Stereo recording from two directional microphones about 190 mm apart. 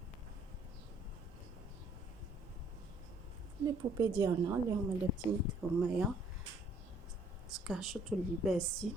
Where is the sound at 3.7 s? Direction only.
20° right (ahead or behind).